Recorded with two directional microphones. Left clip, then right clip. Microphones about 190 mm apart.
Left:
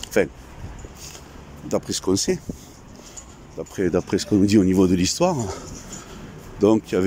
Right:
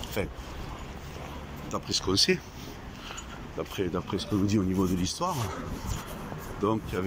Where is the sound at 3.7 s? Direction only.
45° left (ahead or behind).